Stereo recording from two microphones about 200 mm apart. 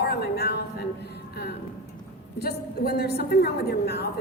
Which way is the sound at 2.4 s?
55° left (ahead or behind).